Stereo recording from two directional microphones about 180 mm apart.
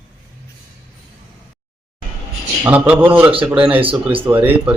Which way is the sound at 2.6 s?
10° right (ahead or behind).